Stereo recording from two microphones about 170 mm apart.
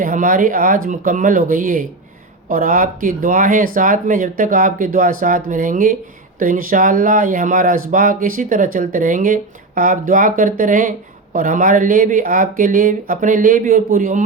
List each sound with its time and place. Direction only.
0.0 s speech: 50° right (ahead or behind)